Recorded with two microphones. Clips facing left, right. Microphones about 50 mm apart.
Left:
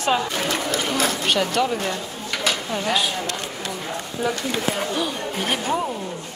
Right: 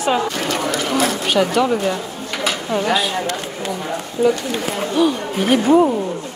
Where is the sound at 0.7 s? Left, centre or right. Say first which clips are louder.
Right 4 dB; right.